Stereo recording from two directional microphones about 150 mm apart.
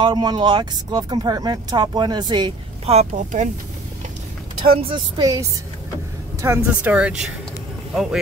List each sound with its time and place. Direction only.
0.0 s speech: 30° right (ahead or behind)
2.9 s speech: 50° right (ahead or behind)
4.8 s speech: 30° right (ahead or behind); by 8.2 s centre (ahead or behind)